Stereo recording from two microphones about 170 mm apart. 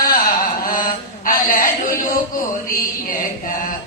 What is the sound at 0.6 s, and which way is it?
Mantra, 55° left (ahead or behind).